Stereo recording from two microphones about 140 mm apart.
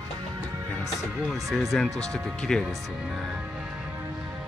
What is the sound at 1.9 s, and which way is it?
Speech, 25° right (ahead or behind).